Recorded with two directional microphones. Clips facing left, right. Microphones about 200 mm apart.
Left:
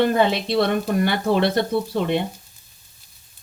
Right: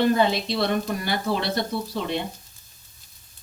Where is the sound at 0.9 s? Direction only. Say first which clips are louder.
Left 7 dB; 60° left (ahead or behind).